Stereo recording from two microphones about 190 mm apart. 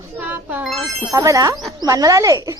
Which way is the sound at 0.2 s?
10° right (ahead or behind).